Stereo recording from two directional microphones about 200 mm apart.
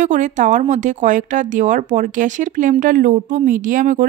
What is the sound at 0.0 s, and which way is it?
A woman's voice, 40° right (ahead or behind).